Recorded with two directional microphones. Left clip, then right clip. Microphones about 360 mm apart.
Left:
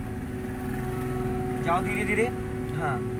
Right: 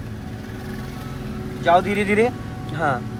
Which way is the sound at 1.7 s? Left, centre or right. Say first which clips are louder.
Right 10 dB; centre.